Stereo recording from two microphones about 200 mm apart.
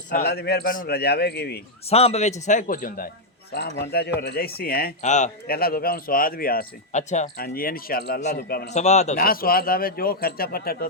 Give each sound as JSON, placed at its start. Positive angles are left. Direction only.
{"t": 0.1, "sound": "speech", "side_deg": 55}
{"t": 1.9, "sound": "speech", "side_deg": 30}
{"t": 5.5, "sound": "speech", "side_deg": 50}
{"t": 8.7, "sound": "speech", "side_deg": 35}